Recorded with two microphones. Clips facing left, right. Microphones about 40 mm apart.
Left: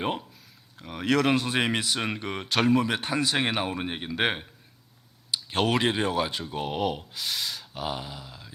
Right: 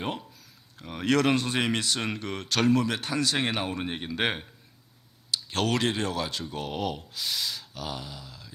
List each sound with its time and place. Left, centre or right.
0.8 s speech: centre; by 8.5 s left